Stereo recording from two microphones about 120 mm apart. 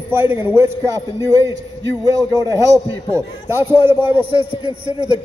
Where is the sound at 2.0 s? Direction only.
30° right (ahead or behind).